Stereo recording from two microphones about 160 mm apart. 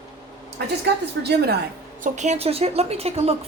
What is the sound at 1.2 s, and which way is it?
Speech, 90° right.